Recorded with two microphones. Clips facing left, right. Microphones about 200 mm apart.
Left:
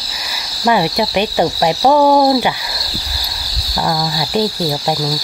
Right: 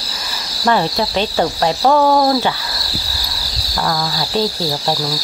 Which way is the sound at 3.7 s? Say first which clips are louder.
Left 2 dB; 15° left (ahead or behind).